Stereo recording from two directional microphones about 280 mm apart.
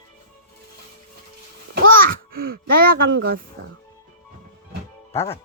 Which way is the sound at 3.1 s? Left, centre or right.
Right.